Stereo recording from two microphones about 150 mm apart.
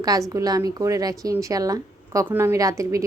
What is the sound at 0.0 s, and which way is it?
A woman's voice, 25° right (ahead or behind).